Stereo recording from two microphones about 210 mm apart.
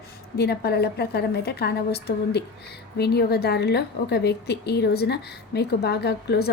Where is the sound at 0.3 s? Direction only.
50° left (ahead or behind).